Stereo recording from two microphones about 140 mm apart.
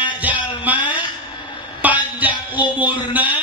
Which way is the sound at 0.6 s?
10° right (ahead or behind).